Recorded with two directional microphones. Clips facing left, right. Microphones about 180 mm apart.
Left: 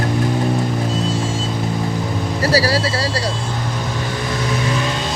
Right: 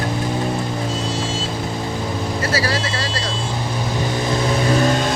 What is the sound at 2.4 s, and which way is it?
Speech, 35° left (ahead or behind).